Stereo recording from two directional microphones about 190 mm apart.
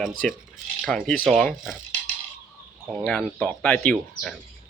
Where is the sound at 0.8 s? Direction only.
5° left (ahead or behind).